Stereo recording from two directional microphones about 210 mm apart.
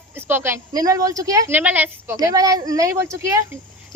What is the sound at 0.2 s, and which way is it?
Speech, 10° right (ahead or behind).